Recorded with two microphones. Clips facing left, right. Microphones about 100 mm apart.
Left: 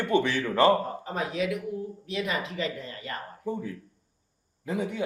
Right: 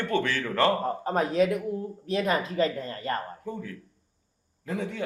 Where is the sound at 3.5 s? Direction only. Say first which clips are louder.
Left 7 dB; 20° left (ahead or behind).